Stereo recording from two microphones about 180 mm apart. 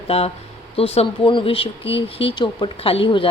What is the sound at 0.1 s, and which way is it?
A woman's voice, 35° left (ahead or behind).